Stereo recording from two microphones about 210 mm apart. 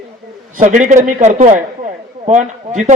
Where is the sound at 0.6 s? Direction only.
35° right (ahead or behind).